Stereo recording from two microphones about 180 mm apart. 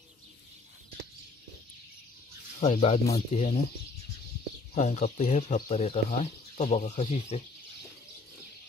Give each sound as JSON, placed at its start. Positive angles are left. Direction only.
{"t": 2.6, "sound": "speech", "side_deg": 40}
{"t": 4.7, "sound": "speech", "side_deg": 40}